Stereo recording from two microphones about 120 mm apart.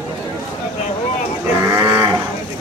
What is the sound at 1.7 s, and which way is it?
Livestock, 20° right (ahead or behind).